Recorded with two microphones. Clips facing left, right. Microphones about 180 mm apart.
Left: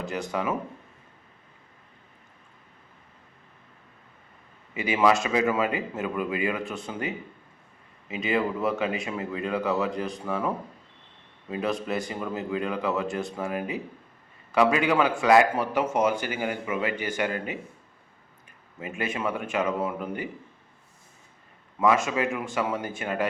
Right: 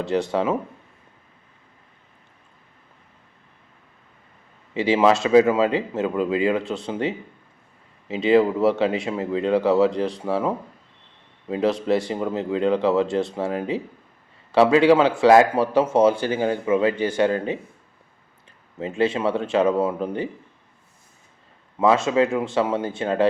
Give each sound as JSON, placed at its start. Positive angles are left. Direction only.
{"t": 0.0, "sound": "speech", "side_deg": -30}
{"t": 4.7, "sound": "speech", "side_deg": -25}
{"t": 16.0, "sound": "speech", "side_deg": 15}
{"t": 16.3, "sound": "speech", "side_deg": -25}
{"t": 18.8, "sound": "speech", "side_deg": -30}
{"t": 21.8, "sound": "speech", "side_deg": -25}